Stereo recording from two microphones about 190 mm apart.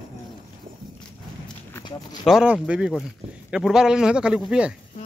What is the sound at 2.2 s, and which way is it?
Speech, 5° right (ahead or behind).